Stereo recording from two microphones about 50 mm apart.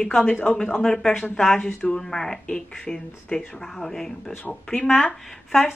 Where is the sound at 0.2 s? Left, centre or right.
Left; by 4.1 s centre.